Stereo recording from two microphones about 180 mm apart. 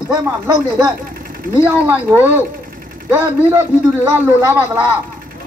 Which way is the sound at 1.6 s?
10° right (ahead or behind).